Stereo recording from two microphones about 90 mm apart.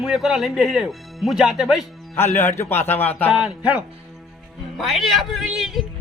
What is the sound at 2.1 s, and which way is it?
Speech, 25° left (ahead or behind).